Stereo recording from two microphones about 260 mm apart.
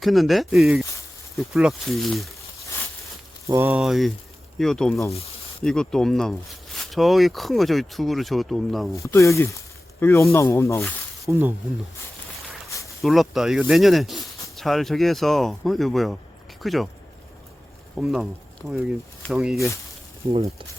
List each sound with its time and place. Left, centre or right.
0.0 s speech: centre
3.4 s speech: centre
9.0 s speech: centre
11.3 s speech: centre
13.0 s speech: centre
17.9 s speech: centre
19.3 s speech: centre
20.3 s speech: right